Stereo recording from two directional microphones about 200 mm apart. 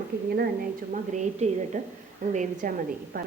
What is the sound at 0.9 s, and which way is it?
A woman's voice, 35° right (ahead or behind).